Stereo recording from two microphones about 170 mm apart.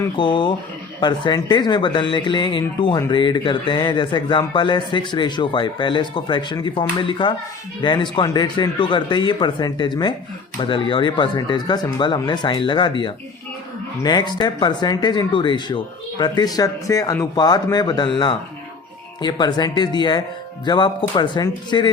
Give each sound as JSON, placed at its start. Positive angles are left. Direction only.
{"t": 0.2, "sound": "speech", "side_deg": 30}